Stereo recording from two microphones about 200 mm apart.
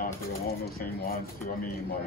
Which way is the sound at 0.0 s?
45° left (ahead or behind).